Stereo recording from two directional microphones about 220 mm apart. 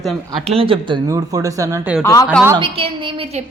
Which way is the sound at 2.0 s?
15° left (ahead or behind).